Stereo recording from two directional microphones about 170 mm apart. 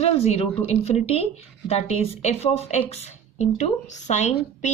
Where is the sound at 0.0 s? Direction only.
35° left (ahead or behind).